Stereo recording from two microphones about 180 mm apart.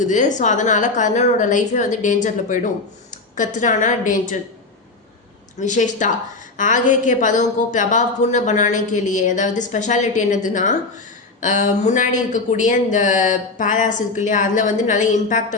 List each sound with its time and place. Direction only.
0.0 s speech: 45° left (ahead or behind)
5.5 s speech: 45° left (ahead or behind)